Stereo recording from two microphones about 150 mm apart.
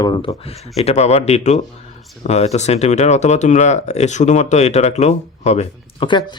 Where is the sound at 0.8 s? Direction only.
45° left (ahead or behind).